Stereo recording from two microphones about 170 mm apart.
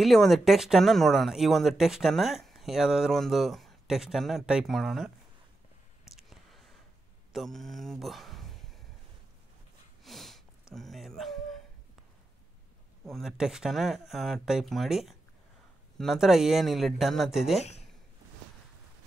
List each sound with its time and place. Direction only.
0.0 s speech: centre (ahead or behind)
6.0 s a sound: centre (ahead or behind)
7.3 s speech: centre (ahead or behind)
10.0 s sniff: centre (ahead or behind)
10.7 s a sound: centre (ahead or behind)
13.0 s speech: centre (ahead or behind)